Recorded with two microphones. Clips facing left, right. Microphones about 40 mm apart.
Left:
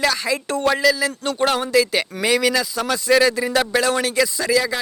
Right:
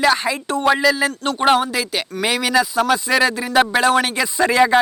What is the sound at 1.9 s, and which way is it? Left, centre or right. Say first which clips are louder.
Speech: left 2 dB; centre.